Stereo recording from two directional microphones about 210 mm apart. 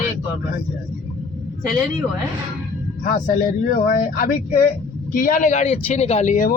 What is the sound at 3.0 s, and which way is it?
Speech, 40° left (ahead or behind).